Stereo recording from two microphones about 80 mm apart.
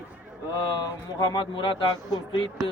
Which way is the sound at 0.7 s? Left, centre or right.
Left.